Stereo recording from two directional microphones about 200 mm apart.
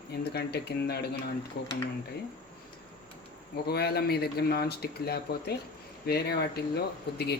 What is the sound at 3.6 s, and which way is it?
Speech, 50° left (ahead or behind).